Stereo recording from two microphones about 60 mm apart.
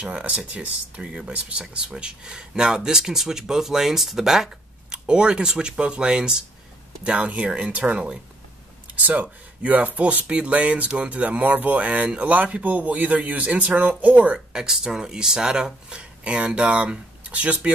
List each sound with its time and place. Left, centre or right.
0.0 s speech: centre
8.9 s speech: right
14.5 s speech: centre